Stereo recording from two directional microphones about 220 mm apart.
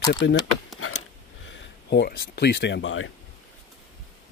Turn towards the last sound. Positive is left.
turn(degrees=60)  # may be behind; listen again after turning